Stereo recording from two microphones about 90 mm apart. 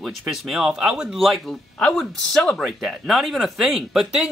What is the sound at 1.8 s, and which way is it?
Speech, 10° left (ahead or behind).